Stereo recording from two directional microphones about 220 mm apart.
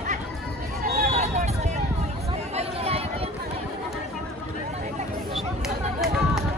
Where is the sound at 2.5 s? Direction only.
30° right (ahead or behind).